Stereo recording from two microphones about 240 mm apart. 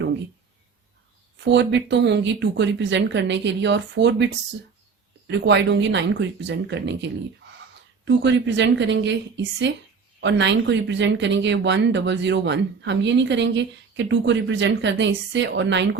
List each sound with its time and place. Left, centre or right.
1.5 s speech: right
5.3 s speech: right